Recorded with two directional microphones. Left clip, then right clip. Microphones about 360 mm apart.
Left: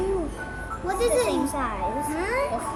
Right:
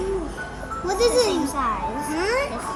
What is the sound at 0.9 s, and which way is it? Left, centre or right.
A child's voice, centre.